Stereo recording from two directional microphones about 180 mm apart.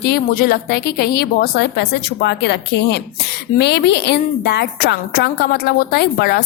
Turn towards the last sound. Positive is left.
turn(degrees=60)  # may be behind; listen again after turning